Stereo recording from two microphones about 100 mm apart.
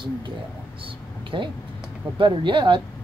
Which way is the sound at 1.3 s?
55° right (ahead or behind).